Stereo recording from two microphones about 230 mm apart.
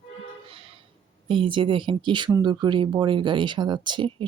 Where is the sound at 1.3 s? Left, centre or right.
Right.